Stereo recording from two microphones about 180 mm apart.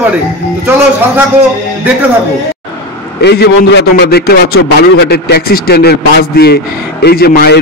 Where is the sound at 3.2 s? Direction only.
65° left (ahead or behind).